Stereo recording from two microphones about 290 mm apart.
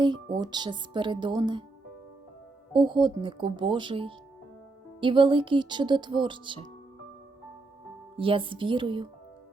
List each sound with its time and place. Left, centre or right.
0.0 s speech: centre
2.7 s speech: centre
8.1 s speech: centre